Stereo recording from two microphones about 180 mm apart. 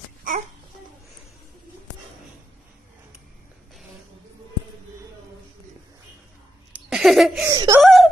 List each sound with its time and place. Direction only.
6.9 s a sound: centre (ahead or behind)
7.4 s speech: 20° right (ahead or behind)
7.8 s wail: centre (ahead or behind)